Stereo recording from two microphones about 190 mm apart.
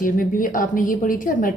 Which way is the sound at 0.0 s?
45° left (ahead or behind).